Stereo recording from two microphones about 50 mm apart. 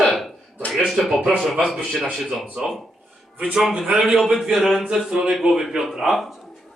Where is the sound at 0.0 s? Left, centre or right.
Centre.